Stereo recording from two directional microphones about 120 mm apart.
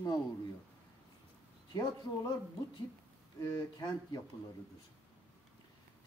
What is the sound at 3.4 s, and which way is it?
Speech, 30° left (ahead or behind).